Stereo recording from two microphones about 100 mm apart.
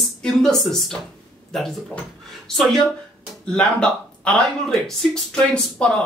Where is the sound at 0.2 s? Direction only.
5° left (ahead or behind).